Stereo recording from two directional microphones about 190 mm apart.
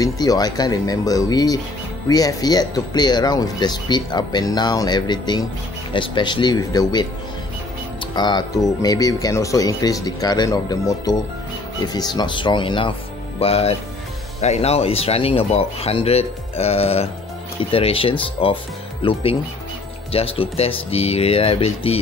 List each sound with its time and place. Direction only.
0.0 s speech: 20° left (ahead or behind)
8.1 s speech: 25° left (ahead or behind)